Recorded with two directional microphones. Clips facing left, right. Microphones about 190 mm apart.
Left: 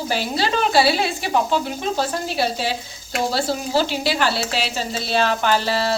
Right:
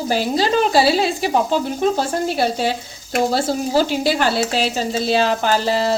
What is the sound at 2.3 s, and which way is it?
A woman's voice, 50° right (ahead or behind).